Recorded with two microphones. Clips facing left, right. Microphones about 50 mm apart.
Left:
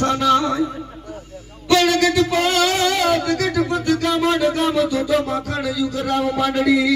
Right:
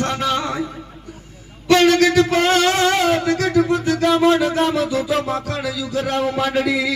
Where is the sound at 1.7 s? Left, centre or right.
Right.